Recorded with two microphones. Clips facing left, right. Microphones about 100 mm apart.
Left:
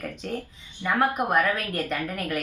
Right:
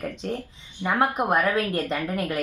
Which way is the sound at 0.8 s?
25° right (ahead or behind).